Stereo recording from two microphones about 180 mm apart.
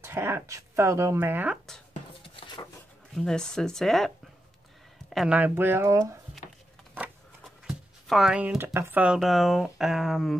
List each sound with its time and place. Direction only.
0.0 s speech: 15° right (ahead or behind)
2.2 s a sound: 30° left (ahead or behind)
3.2 s speech: 5° left (ahead or behind)
5.1 s speech: 5° right (ahead or behind)
7.0 s speech: centre (ahead or behind)